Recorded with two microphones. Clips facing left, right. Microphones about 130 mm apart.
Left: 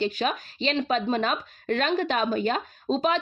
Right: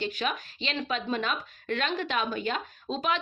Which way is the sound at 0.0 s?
35° left (ahead or behind).